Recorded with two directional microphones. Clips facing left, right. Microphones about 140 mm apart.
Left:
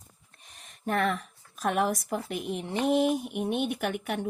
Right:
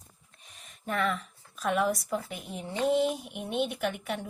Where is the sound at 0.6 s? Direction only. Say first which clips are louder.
Left 3 dB; 45° left (ahead or behind).